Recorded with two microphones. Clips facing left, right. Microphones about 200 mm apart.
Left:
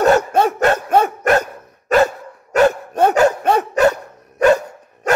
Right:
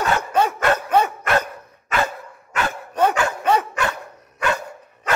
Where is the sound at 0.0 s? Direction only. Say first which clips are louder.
Left 6 dB; 45° left (ahead or behind).